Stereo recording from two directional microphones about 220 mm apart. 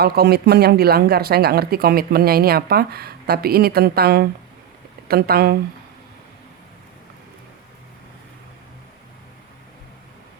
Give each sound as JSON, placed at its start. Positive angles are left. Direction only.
{"t": 0.0, "sound": "speech", "side_deg": -45}